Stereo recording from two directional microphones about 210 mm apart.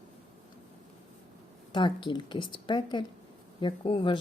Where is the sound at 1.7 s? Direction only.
20° left (ahead or behind).